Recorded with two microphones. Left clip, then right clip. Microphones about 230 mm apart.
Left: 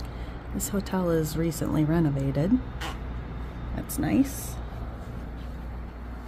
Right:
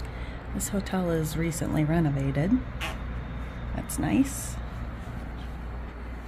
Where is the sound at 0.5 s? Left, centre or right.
Centre.